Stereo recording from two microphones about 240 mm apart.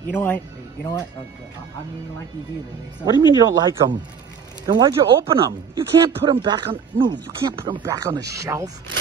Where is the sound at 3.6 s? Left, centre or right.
Centre.